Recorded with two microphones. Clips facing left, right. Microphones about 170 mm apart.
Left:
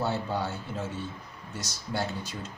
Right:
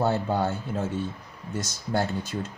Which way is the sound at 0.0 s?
50° right (ahead or behind).